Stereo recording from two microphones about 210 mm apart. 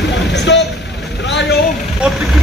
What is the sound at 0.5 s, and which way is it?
Speech, 55° left (ahead or behind).